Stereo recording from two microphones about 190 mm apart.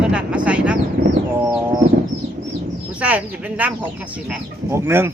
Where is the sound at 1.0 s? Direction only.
50° right (ahead or behind).